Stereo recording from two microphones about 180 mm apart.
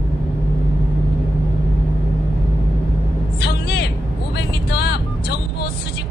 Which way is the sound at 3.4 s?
70° left (ahead or behind).